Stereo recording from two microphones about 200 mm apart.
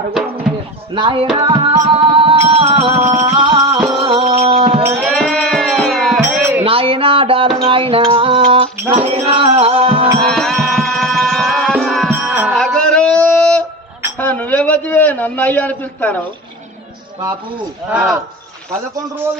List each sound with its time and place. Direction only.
0.9 s music: 25° right (ahead or behind)
5.1 s music: 5° left (ahead or behind)
6.2 s music: 10° right (ahead or behind)
6.7 s a sound: 25° right (ahead or behind)
8.1 s music: 25° right (ahead or behind)
10.2 s music: 5° left (ahead or behind)
12.1 s music: 10° right (ahead or behind)
12.5 s a sound: 5° left (ahead or behind)
17.8 s speech: 10° right (ahead or behind)